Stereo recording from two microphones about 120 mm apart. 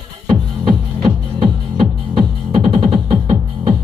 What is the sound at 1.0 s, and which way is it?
Music, 40° right (ahead or behind).